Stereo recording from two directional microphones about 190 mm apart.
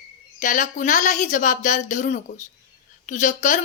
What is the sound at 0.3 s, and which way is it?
A woman's voice, 40° left (ahead or behind).